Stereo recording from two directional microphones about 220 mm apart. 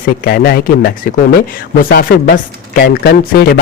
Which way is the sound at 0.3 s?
45° left (ahead or behind).